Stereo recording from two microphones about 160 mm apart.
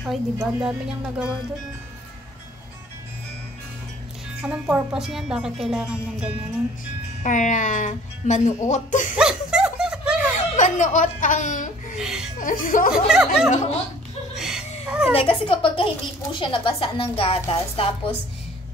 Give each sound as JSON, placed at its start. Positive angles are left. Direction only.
{"t": 0.0, "sound": "speech", "side_deg": -5}
{"t": 4.4, "sound": "speech", "side_deg": -10}
{"t": 7.2, "sound": "speech", "side_deg": 50}
{"t": 9.1, "sound": "snicker", "side_deg": -5}
{"t": 10.3, "sound": "speech", "side_deg": 50}
{"t": 12.0, "sound": "speech", "side_deg": -5}
{"t": 12.4, "sound": "speech", "side_deg": 55}
{"t": 12.9, "sound": "speech", "side_deg": -5}
{"t": 14.3, "sound": "a sound", "side_deg": -5}
{"t": 15.1, "sound": "a woman's voice", "side_deg": 35}